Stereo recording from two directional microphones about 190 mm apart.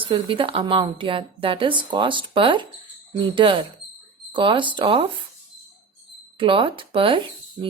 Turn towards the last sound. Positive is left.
turn(degrees=-25)  # may be behind; listen again after turning